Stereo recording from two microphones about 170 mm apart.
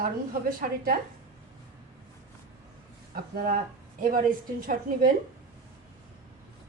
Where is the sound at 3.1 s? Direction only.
55° right (ahead or behind).